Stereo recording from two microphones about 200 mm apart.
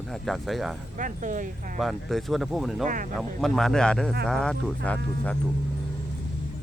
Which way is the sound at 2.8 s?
40° right (ahead or behind).